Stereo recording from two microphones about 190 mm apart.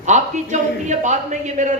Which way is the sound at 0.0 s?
40° right (ahead or behind).